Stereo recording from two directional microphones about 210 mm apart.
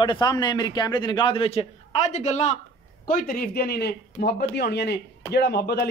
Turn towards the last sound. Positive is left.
turn(degrees=50)  # may be behind; listen again after turning